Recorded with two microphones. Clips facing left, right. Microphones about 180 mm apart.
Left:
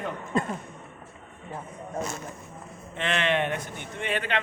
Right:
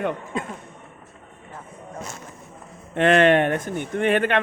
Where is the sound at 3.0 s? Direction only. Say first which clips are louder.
Right 10 dB; 50° right (ahead or behind).